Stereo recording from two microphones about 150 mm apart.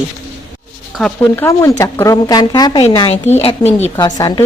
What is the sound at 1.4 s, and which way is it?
Speech, 20° left (ahead or behind).